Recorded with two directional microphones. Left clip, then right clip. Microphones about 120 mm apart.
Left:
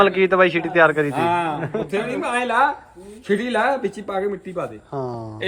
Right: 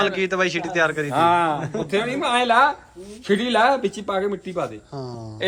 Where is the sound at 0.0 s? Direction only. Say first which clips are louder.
Left 6 dB; 15° right (ahead or behind).